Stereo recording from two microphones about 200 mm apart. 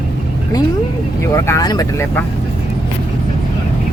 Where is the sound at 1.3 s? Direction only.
15° left (ahead or behind).